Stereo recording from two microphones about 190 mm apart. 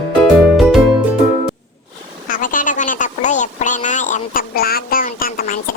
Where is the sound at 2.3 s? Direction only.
45° left (ahead or behind).